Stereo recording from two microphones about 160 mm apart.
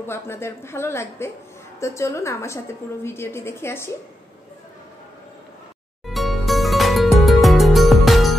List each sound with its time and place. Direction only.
0.0 s a woman's voice: 15° left (ahead or behind)
6.0 s music: centre (ahead or behind)